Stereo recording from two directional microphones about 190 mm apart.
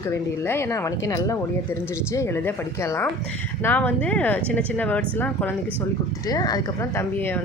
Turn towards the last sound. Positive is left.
turn(degrees=10)  # may be behind; listen again after turning